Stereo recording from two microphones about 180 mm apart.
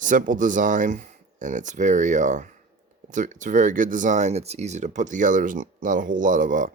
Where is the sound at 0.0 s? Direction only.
45° right (ahead or behind).